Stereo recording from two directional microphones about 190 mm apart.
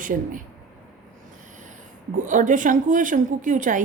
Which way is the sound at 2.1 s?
40° right (ahead or behind).